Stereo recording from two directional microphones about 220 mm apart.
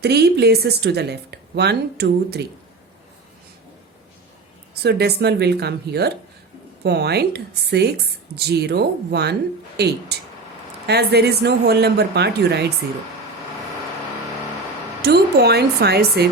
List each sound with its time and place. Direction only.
0.0 s a woman's voice: 50° right (ahead or behind)
4.7 s a woman's voice: 45° right (ahead or behind)
15.0 s a woman's voice: 45° right (ahead or behind)